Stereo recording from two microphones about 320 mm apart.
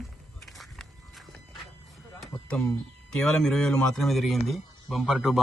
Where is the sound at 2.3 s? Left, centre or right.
Centre.